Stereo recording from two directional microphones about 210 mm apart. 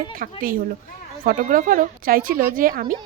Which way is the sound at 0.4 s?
45° right (ahead or behind).